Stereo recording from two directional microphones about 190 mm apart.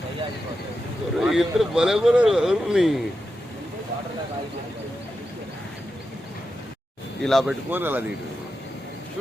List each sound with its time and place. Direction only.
1.2 s speech: centre (ahead or behind)
7.2 s speech: centre (ahead or behind)
7.7 s speech: 10° right (ahead or behind)